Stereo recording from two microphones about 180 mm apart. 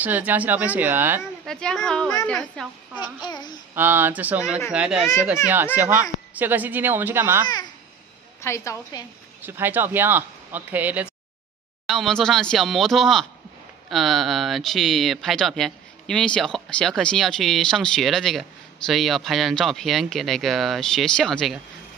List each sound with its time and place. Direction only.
0.0 s speech: 10° right (ahead or behind)
1.4 s speech: 5° left (ahead or behind)
3.0 s a child's voice: 25° left (ahead or behind)
3.7 s speech: 10° right (ahead or behind)
8.4 s a woman's voice: 15° left (ahead or behind)
9.4 s speech: 10° right (ahead or behind)
11.8 s speech: centre (ahead or behind)